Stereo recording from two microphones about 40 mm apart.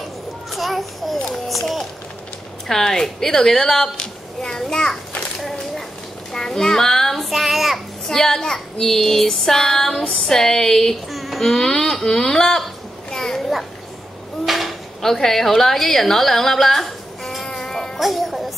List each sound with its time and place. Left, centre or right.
0.5 s a sound: centre
1.5 s run: centre
2.7 s child singing: centre
3.9 s a child's voice: centre
5.4 s a sound: centre
6.3 s a child's voice: centre
7.2 s child singing: centre
8.1 s child singing: centre
11.1 s child singing: centre
13.1 s a sound: centre
14.4 s a sound: centre
15.0 s a woman's voice: centre
17.5 s baby cry: centre
17.9 s a child's voice: centre